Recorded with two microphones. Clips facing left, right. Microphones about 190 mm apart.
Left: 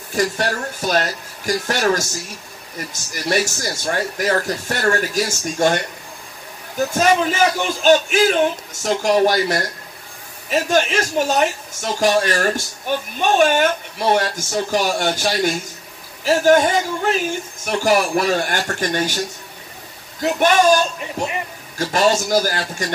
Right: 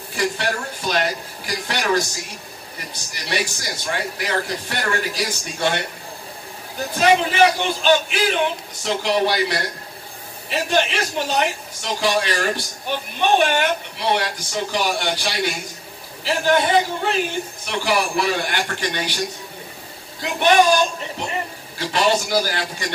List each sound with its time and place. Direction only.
0.1 s speech: 45° left (ahead or behind)
6.9 s speech: 45° left (ahead or behind)
20.2 s speech: 45° left (ahead or behind)
21.7 s speech: 45° left (ahead or behind)